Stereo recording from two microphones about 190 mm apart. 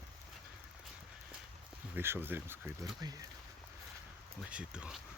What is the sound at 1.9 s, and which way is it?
Speech, 10° right (ahead or behind).